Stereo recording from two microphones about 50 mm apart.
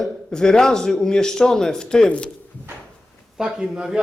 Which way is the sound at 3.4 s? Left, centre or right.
Centre.